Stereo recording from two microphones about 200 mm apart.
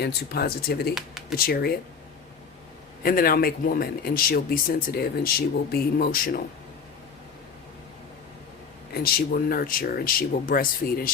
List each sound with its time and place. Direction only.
0.0 s speech: 55° left (ahead or behind)
3.0 s speech: 45° left (ahead or behind)
8.9 s speech: 50° left (ahead or behind)